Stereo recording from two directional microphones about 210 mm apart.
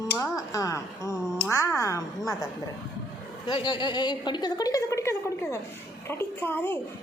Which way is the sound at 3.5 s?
25° left (ahead or behind).